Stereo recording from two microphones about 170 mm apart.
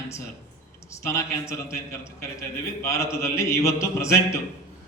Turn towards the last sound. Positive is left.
turn(degrees=15)  # may be behind; listen again after turning